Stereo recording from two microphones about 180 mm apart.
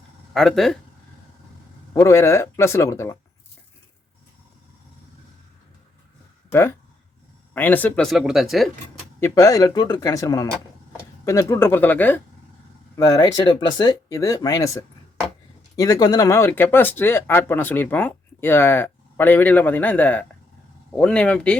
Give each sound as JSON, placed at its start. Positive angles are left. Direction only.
{"t": 0.3, "sound": "speech", "side_deg": 0}
{"t": 1.9, "sound": "speech", "side_deg": 15}
{"t": 6.5, "sound": "speech", "side_deg": 15}
{"t": 9.2, "sound": "speech", "side_deg": 20}